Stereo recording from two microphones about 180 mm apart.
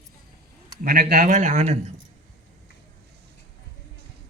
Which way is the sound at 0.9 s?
60° right (ahead or behind).